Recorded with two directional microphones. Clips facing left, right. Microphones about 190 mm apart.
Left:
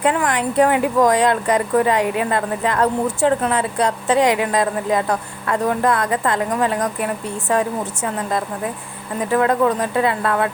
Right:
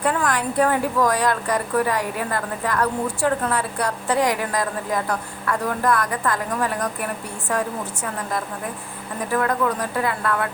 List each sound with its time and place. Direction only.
0.0 s a woman's voice: 20° left (ahead or behind)
9.3 s a woman's voice: 25° left (ahead or behind)